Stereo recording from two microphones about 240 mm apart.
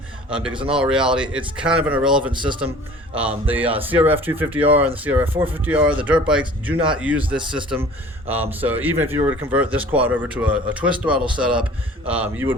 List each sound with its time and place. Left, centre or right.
0.3 s speech: centre
0.5 s a man's voice: right
0.8 s speech: centre
2.3 s a man's voice: centre
3.2 s speech: centre
8.3 s speech: centre